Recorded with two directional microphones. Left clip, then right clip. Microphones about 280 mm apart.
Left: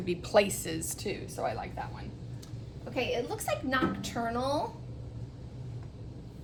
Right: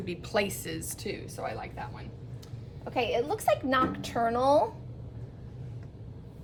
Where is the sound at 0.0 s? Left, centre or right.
Centre.